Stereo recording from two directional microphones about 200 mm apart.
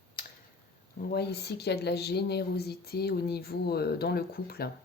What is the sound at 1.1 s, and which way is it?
Speech, 55° left (ahead or behind).